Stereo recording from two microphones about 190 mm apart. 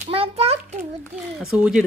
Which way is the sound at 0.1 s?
30° right (ahead or behind).